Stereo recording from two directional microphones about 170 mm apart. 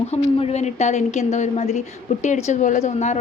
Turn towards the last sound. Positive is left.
turn(degrees=40)  # may be behind; listen again after turning